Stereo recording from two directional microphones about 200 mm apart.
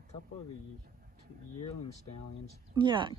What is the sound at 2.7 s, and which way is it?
Speech, 25° right (ahead or behind).